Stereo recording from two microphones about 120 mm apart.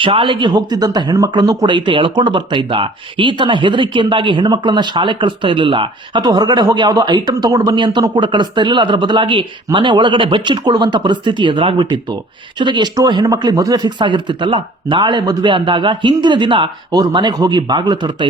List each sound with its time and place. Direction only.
0.0 s speech: 45° right (ahead or behind)